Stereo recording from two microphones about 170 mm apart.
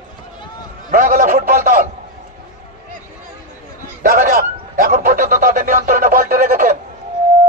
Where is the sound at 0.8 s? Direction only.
50° right (ahead or behind).